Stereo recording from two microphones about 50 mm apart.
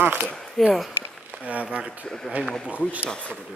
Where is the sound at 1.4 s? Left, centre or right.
Right.